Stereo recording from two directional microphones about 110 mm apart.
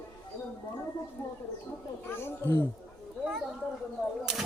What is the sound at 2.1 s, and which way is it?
Speech, 20° left (ahead or behind).